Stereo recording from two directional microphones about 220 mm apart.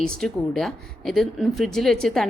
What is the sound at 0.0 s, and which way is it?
Speech, 5° left (ahead or behind).